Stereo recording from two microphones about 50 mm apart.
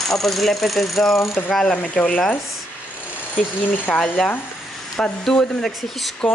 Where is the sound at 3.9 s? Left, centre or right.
Left.